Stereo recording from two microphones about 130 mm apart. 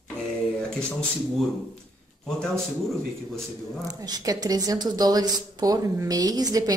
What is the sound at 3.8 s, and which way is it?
A woman's voice, 30° right (ahead or behind).